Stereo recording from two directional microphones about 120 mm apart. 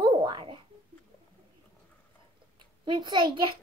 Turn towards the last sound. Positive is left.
turn(degrees=-40)  # may be behind; listen again after turning